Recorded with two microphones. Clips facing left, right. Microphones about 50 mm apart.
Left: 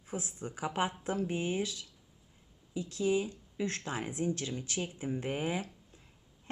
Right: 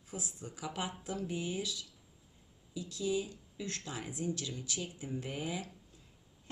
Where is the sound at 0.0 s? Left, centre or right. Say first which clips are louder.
Left 5 dB; left.